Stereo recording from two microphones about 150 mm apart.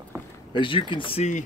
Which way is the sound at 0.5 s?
35° left (ahead or behind).